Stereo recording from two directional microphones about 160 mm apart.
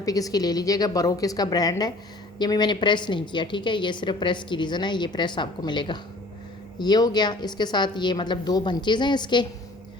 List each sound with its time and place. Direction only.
0.0 s a woman's voice: 20° left (ahead or behind)